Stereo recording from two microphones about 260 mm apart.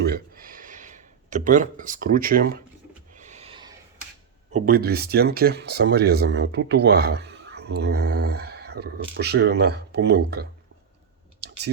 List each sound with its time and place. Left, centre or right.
0.0 s a sound: right; by 3.8 s centre
4.5 s speech: right
11.4 s clicking: right